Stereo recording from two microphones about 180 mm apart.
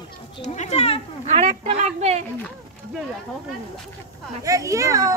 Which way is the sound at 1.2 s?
40° right (ahead or behind).